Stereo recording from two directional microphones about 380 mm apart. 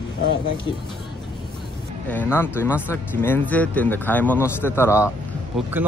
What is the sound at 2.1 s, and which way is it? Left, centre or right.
Speech, centre.